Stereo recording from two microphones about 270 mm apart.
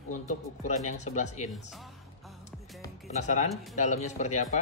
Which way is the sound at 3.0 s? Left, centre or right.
Left.